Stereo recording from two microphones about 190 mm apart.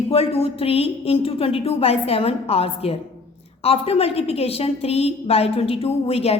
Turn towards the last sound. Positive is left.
turn(degrees=30)  # may be behind; listen again after turning